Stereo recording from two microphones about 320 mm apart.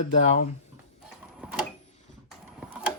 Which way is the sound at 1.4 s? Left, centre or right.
Centre.